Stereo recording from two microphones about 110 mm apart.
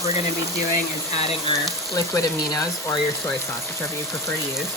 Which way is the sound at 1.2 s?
65° left (ahead or behind).